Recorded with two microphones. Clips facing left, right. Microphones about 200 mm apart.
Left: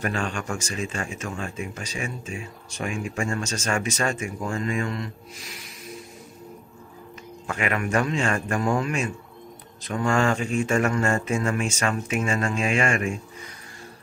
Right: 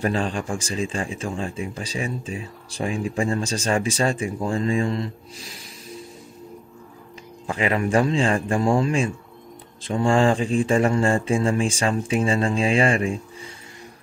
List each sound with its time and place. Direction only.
0.0 s speech: 35° right (ahead or behind)
7.4 s speech: 30° right (ahead or behind)